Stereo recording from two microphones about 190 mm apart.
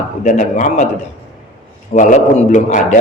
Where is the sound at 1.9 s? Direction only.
40° left (ahead or behind).